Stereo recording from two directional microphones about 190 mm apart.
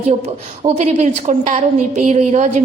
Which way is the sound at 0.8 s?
40° right (ahead or behind).